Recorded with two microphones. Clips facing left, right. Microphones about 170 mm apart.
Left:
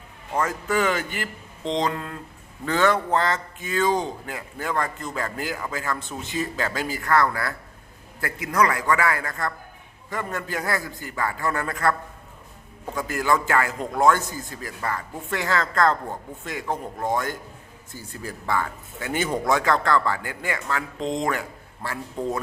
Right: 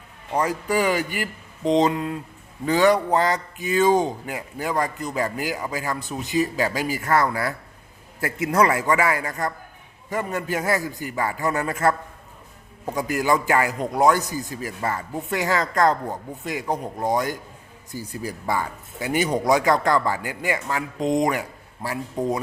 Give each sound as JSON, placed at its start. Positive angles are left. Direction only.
{"t": 0.3, "sound": "a man's voice", "side_deg": -15}